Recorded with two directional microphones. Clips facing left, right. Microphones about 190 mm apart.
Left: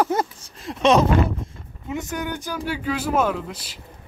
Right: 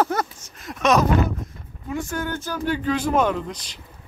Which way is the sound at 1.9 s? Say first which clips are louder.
Right 1 dB; 20° left (ahead or behind).